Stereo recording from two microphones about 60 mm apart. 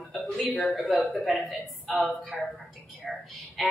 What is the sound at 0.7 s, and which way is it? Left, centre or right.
Speech, centre.